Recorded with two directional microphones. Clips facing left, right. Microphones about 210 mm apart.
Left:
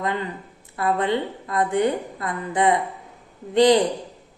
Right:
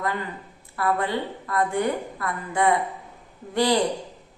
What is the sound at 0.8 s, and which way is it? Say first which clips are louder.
Speech: left 3 dB; 20° left (ahead or behind).